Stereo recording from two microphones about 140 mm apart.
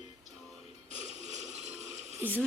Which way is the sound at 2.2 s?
15° right (ahead or behind).